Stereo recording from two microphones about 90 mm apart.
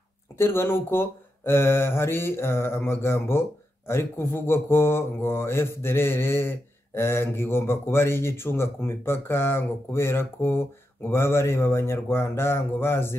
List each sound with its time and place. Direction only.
0.4 s speech: 25° left (ahead or behind)